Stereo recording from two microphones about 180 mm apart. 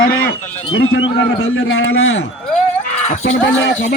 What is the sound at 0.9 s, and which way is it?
A man's voice, 90° left.